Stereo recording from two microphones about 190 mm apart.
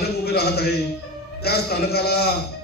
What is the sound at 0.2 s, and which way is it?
A man's voice, 55° left (ahead or behind).